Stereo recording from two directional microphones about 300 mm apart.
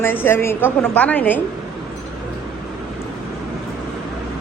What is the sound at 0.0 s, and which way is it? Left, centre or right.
A woman's voice, centre.